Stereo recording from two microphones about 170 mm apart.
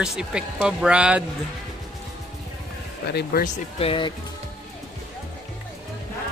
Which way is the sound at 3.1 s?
65° left (ahead or behind).